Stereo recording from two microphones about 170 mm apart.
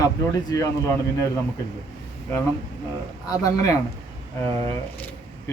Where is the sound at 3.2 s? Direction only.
20° left (ahead or behind).